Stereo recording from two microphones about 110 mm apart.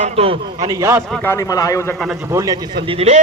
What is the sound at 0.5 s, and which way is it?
Speech, 35° right (ahead or behind).